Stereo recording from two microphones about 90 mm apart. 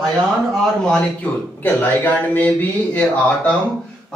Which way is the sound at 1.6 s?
20° left (ahead or behind).